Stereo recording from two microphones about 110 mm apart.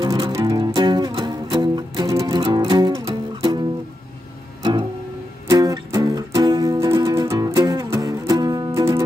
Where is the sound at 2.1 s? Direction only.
30° right (ahead or behind).